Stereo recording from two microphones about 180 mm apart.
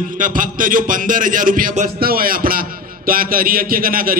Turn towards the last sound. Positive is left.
turn(degrees=-55)  # may be behind; listen again after turning